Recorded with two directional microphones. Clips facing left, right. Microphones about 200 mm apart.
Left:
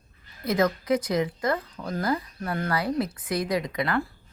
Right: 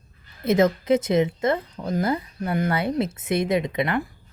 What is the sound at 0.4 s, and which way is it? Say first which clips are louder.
Speech: right 5 dB; 25° right (ahead or behind).